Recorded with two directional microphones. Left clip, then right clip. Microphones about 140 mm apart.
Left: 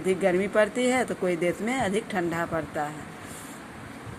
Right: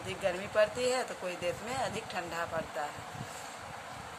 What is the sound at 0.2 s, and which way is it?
Speech, 40° left (ahead or behind).